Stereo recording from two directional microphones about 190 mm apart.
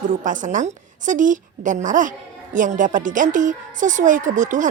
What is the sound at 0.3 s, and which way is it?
A woman's voice, 40° right (ahead or behind).